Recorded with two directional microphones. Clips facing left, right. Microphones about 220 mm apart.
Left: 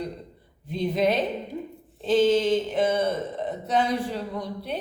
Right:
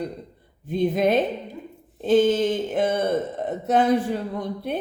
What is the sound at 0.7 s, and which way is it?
Speech, 50° right (ahead or behind).